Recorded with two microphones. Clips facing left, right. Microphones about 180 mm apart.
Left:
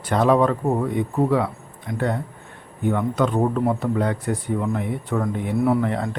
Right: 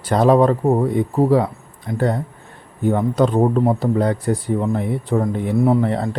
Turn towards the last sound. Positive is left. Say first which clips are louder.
# right 3 dB
turn(degrees=-30)  # may be behind; listen again after turning